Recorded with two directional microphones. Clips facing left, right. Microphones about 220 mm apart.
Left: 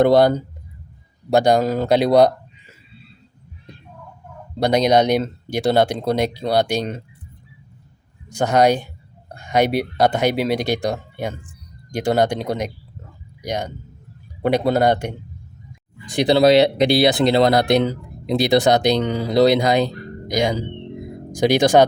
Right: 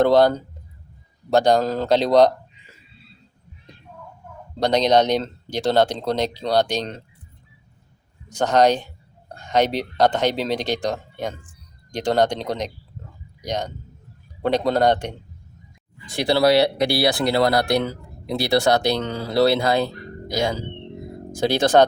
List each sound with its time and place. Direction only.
0.0 s speech: 15° left (ahead or behind)
4.6 s speech: 10° left (ahead or behind)
8.3 s speech: 10° left (ahead or behind)